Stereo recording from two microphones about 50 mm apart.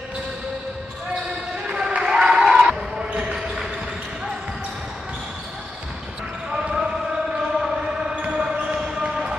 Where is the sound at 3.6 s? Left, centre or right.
Centre.